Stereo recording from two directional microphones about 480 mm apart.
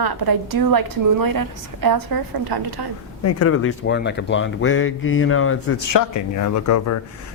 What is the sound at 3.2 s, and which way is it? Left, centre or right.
Speech, left.